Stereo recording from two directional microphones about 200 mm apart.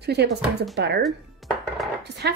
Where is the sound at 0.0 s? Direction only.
55° right (ahead or behind).